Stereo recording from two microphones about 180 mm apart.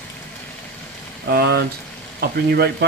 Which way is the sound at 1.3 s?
65° right (ahead or behind).